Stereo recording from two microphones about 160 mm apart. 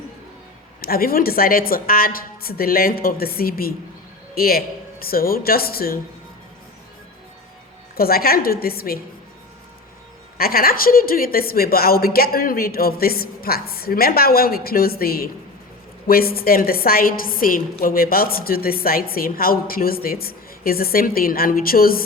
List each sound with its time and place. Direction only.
0.8 s a woman's voice: 70° left (ahead or behind)
7.9 s a woman's voice: 70° left (ahead or behind)
10.3 s a woman's voice: 65° left (ahead or behind)